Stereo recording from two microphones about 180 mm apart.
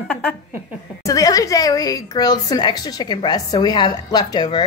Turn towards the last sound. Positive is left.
turn(degrees=25)  # may be behind; listen again after turning